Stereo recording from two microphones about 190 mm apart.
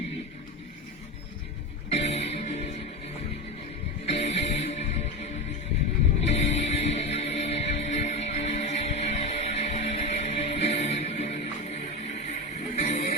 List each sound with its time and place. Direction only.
1.9 s music: 35° left (ahead or behind)
4.0 s music: 35° left (ahead or behind)